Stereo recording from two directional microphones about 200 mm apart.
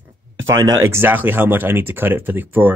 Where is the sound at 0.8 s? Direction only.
10° right (ahead or behind).